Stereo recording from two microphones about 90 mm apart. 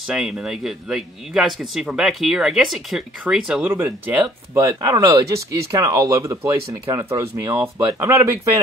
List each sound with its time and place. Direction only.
0.0 s a man's voice: 5° right (ahead or behind)
3.6 s speech: 25° right (ahead or behind)
4.6 s speech: 35° right (ahead or behind)